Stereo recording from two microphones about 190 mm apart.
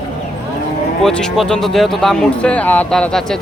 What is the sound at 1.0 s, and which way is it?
Speech, 5° left (ahead or behind).